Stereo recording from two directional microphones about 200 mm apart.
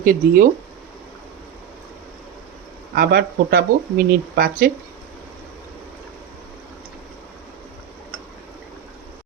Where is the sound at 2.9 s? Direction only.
50° right (ahead or behind).